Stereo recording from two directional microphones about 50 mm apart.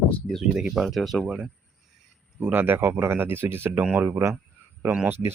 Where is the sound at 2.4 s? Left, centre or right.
Right.